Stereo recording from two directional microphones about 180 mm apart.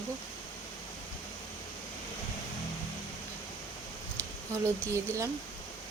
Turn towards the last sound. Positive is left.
turn(degrees=-15)  # may be behind; listen again after turning